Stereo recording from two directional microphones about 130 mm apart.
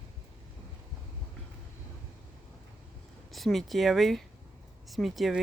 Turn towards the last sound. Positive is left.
turn(degrees=0)  # may be behind; listen again after turning